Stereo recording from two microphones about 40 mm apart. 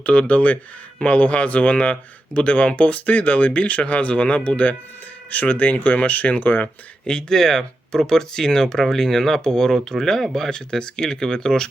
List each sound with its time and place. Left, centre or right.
0.0 s speech: left
7.1 s speech: left
7.3 s speech: centre